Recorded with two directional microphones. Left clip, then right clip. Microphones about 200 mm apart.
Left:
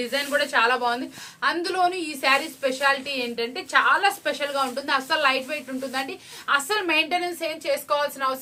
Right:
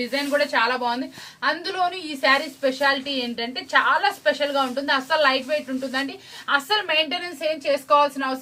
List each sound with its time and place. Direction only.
0.0 s a woman's voice: 45° left (ahead or behind); by 8.4 s 20° left (ahead or behind)